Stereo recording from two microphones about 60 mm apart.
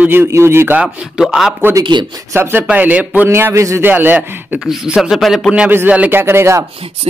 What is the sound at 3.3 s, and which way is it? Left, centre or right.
Speech, right.